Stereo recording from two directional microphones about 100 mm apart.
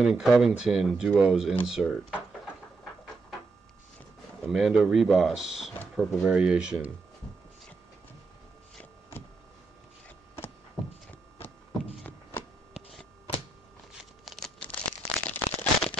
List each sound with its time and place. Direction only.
0.0 s speech: centre (ahead or behind)
4.5 s speech: centre (ahead or behind)
11.1 s hum: 20° left (ahead or behind)
12.0 s a sound: 15° left (ahead or behind)
14.2 s crumpling: centre (ahead or behind)
14.9 s a sound: 10° left (ahead or behind)